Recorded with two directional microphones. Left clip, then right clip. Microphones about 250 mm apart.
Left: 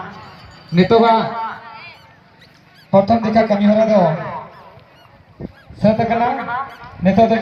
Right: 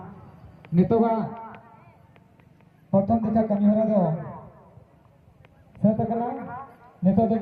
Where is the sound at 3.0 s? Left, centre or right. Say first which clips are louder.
Left 10 dB; centre.